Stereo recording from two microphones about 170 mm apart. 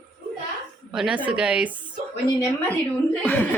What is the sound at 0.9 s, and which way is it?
Speech, 5° right (ahead or behind).